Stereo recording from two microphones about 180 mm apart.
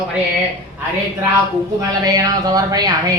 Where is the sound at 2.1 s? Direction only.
20° right (ahead or behind).